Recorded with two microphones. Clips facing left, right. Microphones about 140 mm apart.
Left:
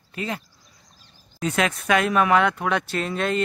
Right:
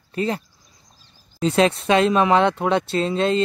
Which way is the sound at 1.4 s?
30° right (ahead or behind).